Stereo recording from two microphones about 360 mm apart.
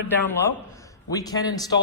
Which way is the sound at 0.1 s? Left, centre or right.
Centre.